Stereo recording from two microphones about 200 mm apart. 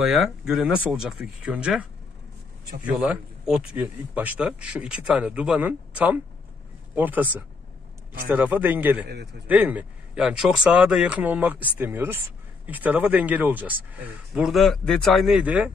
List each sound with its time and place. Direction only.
0.0 s speech: centre (ahead or behind)
9.0 s a man's voice: 55° right (ahead or behind)
9.5 s speech: 10° right (ahead or behind)